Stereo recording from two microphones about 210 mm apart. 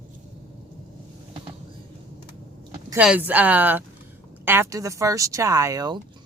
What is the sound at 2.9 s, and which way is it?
Speech, 5° right (ahead or behind).